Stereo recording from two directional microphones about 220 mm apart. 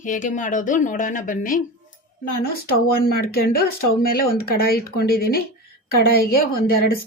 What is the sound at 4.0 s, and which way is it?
Speech, 40° left (ahead or behind).